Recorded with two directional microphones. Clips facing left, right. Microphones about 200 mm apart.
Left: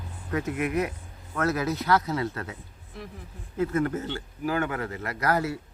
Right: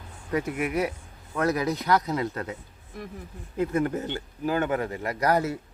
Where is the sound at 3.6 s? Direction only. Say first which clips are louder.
Even; 15° right (ahead or behind).